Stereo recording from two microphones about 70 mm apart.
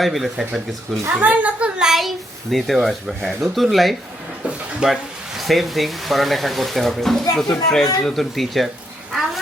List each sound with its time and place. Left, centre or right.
0.0 s speech: centre
1.1 s a woman's voice: right
1.8 s speech: centre
4.8 s speech: centre
5.4 s speech: centre